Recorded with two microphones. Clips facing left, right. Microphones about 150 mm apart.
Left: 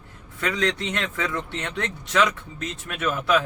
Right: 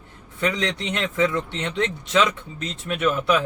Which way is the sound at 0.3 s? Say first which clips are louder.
Even; 20° right (ahead or behind).